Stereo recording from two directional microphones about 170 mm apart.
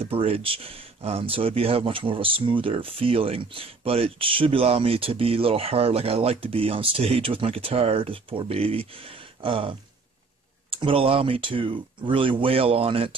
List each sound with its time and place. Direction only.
0.0 s speech: 35° right (ahead or behind)